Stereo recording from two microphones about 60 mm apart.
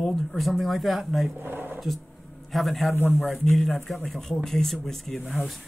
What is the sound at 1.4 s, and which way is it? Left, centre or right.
Speech, right.